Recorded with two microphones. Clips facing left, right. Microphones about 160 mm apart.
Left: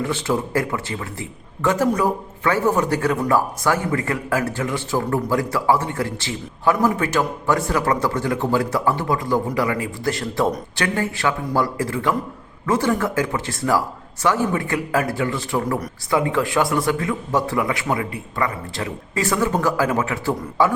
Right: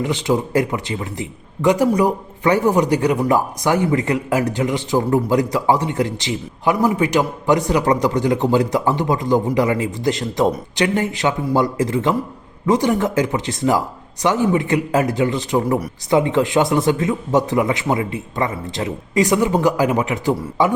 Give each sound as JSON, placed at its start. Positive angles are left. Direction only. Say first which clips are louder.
{"t": 0.0, "sound": "speech", "louder": "right 3 dB", "side_deg": -15}